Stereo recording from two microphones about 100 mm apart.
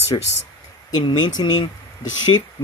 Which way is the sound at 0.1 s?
50° left (ahead or behind).